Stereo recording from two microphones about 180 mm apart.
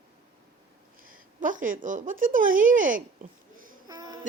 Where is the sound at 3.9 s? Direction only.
20° right (ahead or behind).